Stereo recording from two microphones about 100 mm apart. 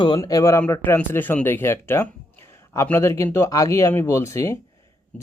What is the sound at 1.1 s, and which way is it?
Speech, 20° left (ahead or behind).